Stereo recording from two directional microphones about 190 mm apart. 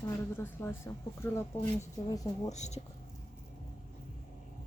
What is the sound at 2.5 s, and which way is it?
Speech, 35° left (ahead or behind).